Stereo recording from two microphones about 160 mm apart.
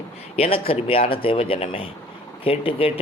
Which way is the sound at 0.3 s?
40° left (ahead or behind).